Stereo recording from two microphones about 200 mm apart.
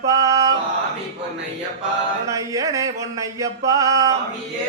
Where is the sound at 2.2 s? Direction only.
15° right (ahead or behind).